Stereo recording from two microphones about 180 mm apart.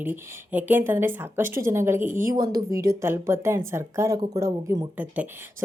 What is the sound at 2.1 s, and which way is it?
Speech, 50° right (ahead or behind).